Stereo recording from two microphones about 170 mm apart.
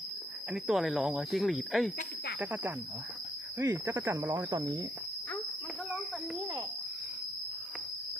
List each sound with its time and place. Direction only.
0.5 s speech: centre (ahead or behind)
2.4 s cricket: 10° right (ahead or behind)